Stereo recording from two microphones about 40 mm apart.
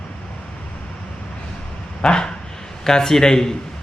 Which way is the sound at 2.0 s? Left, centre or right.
Left.